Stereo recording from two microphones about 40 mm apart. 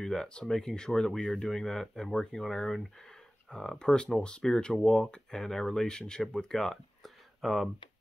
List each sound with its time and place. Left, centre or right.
0.0 s speech: centre
3.7 s speech: left; by 7.7 s centre